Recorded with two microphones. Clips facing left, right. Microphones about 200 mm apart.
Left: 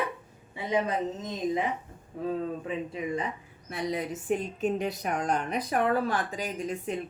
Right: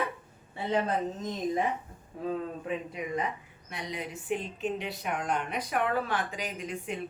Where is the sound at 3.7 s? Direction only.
35° left (ahead or behind).